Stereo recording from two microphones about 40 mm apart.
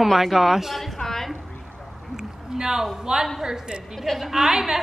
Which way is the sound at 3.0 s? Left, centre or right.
Centre.